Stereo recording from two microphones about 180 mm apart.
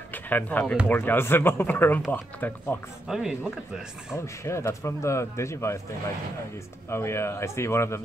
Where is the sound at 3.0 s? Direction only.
5° right (ahead or behind).